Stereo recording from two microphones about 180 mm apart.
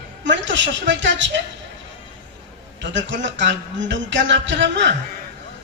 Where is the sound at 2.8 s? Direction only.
85° right.